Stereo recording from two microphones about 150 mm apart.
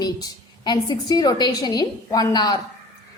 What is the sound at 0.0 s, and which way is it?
A woman's voice, 25° left (ahead or behind).